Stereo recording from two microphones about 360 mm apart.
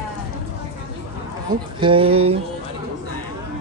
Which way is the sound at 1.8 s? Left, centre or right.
Centre.